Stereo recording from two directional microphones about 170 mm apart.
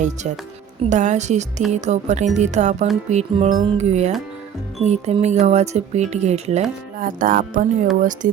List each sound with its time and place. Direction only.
0.0 s a woman's voice: 45° right (ahead or behind)